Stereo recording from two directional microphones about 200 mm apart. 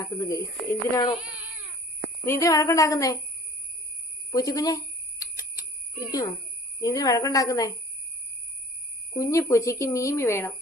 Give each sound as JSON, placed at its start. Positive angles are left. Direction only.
{"t": 0.0, "sound": "speech", "side_deg": 15}
{"t": 1.2, "sound": "cat", "side_deg": -5}
{"t": 2.2, "sound": "speech", "side_deg": 15}
{"t": 4.3, "sound": "speech", "side_deg": 15}
{"t": 5.2, "sound": "alarm", "side_deg": 15}
{"t": 6.0, "sound": "a child's voice", "side_deg": 20}
{"t": 9.1, "sound": "speech", "side_deg": 15}